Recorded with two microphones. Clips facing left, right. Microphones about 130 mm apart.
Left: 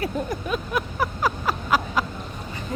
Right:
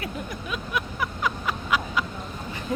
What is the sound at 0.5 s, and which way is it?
Vehicle, 40° left (ahead or behind).